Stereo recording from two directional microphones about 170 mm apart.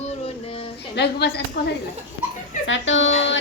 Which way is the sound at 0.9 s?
75° left (ahead or behind).